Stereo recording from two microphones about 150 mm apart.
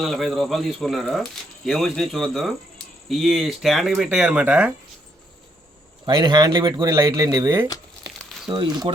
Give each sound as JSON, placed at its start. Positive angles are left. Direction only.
{"t": 0.0, "sound": "speech", "side_deg": 0}
{"t": 6.1, "sound": "speech", "side_deg": -30}